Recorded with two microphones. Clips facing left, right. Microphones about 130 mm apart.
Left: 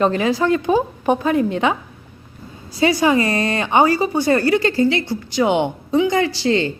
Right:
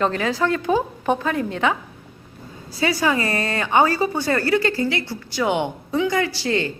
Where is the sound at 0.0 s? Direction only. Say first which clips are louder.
Left 4 dB; 15° left (ahead or behind).